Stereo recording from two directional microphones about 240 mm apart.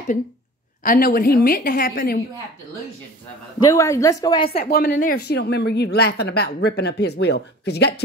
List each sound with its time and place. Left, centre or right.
0.8 s a woman's voice: left
3.5 s a woman's voice: centre
4.5 s a woman's voice: left